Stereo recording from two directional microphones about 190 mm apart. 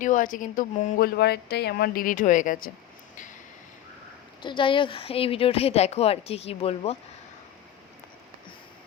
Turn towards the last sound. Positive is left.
turn(degrees=30)  # may be behind; listen again after turning